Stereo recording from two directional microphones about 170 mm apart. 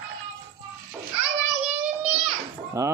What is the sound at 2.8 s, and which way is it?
Speech, 20° right (ahead or behind).